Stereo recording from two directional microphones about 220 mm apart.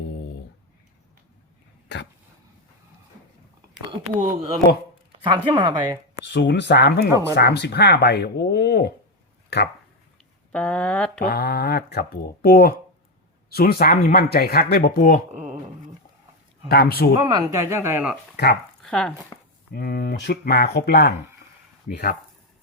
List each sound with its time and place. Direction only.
4.2 s speech: 35° right (ahead or behind)
5.2 s speech: 20° right (ahead or behind)
6.2 s speech: 50° left (ahead or behind)
7.1 s speech: 15° right (ahead or behind)
7.3 s speech: 50° left (ahead or behind)
10.5 s speech: 5° left (ahead or behind)
11.2 s speech: 45° left (ahead or behind)
16.6 s speech: 45° left (ahead or behind)
17.2 s speech: 15° right (ahead or behind)
18.8 s chopping: 5° left (ahead or behind)
19.7 s speech: 45° left (ahead or behind)